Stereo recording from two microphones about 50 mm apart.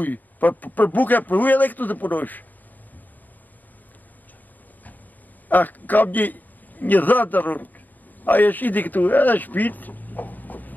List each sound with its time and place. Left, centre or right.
0.0 s speech: left
5.5 s a man's voice: left